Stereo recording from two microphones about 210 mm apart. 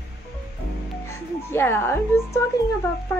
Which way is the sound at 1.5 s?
10° left (ahead or behind).